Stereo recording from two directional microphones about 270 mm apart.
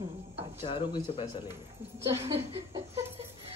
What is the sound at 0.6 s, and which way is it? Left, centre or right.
Speech, centre.